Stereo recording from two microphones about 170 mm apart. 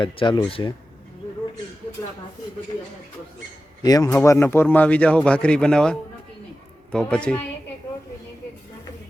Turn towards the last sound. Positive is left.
turn(degrees=5)  # may be behind; listen again after turning